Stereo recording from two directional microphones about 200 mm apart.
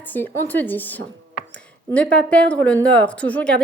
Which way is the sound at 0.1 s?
10° left (ahead or behind).